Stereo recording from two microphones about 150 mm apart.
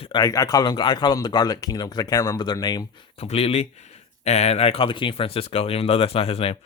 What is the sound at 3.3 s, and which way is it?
Speech, 40° left (ahead or behind).